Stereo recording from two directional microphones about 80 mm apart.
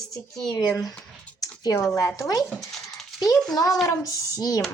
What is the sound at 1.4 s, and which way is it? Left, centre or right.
Typing, left.